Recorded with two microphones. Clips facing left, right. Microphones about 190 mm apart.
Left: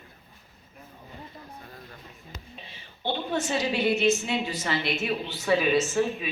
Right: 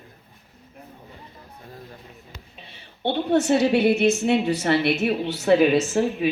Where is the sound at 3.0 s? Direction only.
65° right (ahead or behind).